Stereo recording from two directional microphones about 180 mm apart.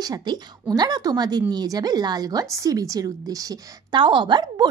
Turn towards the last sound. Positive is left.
turn(degrees=-25)  # may be behind; listen again after turning